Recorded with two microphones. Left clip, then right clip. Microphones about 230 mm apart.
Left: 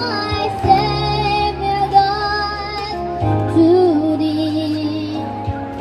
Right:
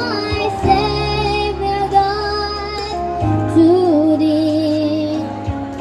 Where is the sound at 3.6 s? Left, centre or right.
Right.